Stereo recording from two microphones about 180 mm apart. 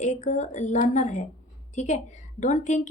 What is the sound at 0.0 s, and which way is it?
A woman's voice, 40° left (ahead or behind).